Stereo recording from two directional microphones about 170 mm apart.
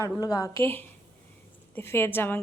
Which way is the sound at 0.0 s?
20° left (ahead or behind).